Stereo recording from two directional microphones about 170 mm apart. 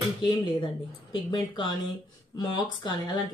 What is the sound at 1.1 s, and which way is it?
Speech, 30° left (ahead or behind).